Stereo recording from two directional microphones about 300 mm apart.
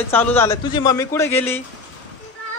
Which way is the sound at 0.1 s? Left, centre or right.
Centre.